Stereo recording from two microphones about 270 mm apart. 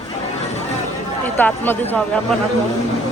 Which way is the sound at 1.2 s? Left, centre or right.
Centre.